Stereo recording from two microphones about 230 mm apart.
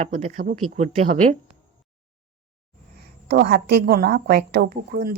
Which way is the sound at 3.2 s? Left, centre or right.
Right.